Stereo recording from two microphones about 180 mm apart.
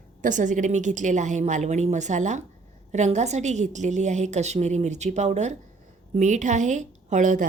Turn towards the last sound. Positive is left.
turn(degrees=-45)  # may be behind; listen again after turning